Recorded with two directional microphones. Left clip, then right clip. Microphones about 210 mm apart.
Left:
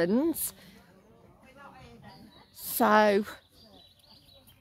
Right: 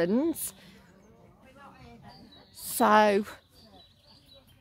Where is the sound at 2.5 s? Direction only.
Centre (ahead or behind).